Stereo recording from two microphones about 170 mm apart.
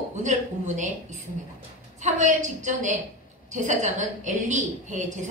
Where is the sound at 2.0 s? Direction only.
45° right (ahead or behind).